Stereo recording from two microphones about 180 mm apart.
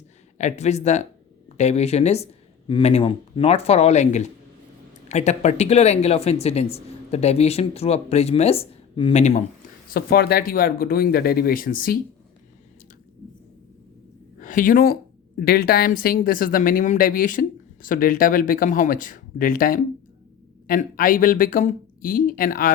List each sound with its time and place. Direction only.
0.3 s speech: 40° left (ahead or behind)
9.9 s speech: 60° left (ahead or behind)
14.3 s a woman's voice: 45° left (ahead or behind)